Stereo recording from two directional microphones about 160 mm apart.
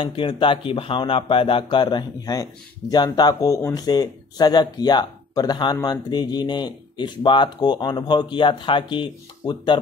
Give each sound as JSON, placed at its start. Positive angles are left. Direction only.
{"t": 0.0, "sound": "speech", "side_deg": 35}